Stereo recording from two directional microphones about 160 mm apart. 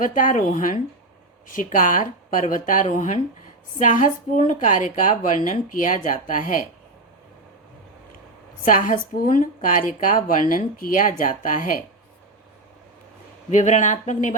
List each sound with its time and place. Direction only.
0.0 s a woman's voice: 55° left (ahead or behind)
8.6 s a woman's voice: 55° left (ahead or behind)
13.5 s a woman's voice: 50° left (ahead or behind)